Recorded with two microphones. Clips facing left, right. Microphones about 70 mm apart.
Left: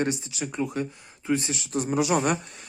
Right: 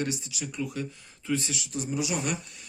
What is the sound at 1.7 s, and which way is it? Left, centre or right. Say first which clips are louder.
Speech: left 7 dB; left.